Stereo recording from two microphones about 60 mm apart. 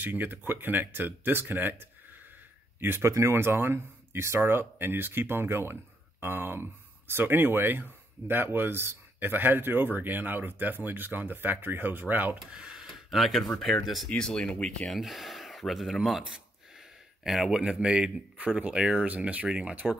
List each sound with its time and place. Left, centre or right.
0.0 s speech: right
3.0 s speech: right
3.3 s speech: right
12.4 s speech: centre
12.8 s a sound: centre
13.8 s speech: centre
14.1 s speech: centre
14.9 s speech: centre; by 19.9 s right